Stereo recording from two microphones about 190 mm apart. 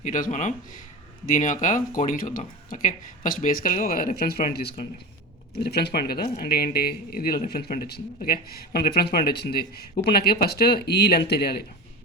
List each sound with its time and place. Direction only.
0.0 s speech: 45° left (ahead or behind)